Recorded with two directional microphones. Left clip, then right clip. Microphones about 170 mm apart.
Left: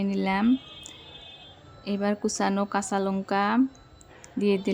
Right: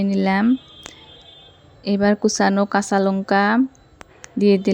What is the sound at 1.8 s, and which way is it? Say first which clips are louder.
Speech: right 10 dB; 30° right (ahead or behind).